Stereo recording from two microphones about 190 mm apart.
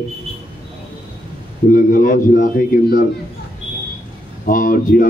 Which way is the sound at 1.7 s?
45° left (ahead or behind).